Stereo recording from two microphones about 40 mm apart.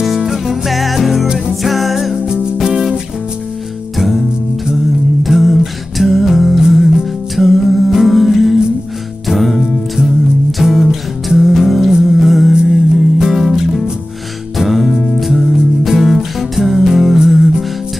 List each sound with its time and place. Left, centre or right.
0.0 s music: centre
2.1 s music: right
2.5 s music: centre
5.2 s music: centre
10.6 s music: centre